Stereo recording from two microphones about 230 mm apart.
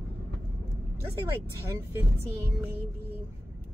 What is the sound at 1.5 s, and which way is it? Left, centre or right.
Speech, centre.